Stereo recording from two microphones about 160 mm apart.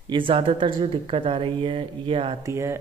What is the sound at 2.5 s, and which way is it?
Speech, 15° right (ahead or behind).